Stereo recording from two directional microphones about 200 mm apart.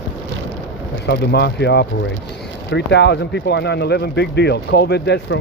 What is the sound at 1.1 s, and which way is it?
Speech, 55° left (ahead or behind).